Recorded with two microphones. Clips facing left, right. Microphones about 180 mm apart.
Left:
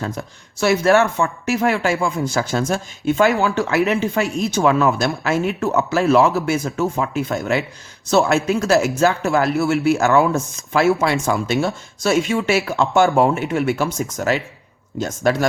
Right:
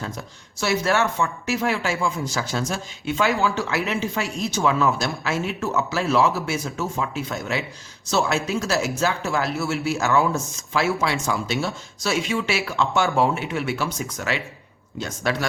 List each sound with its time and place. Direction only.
0.6 s speech: 55° left (ahead or behind)